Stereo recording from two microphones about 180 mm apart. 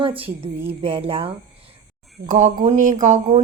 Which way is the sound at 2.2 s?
45° right (ahead or behind).